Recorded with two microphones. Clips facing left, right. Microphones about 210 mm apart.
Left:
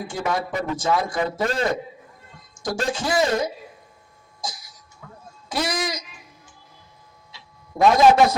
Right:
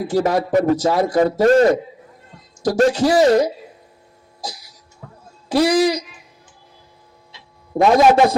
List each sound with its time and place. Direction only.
0.1 s speech: 35° right (ahead or behind)
4.4 s a sound: 35° right (ahead or behind)
5.5 s speech: 35° right (ahead or behind)
7.8 s speech: 30° right (ahead or behind)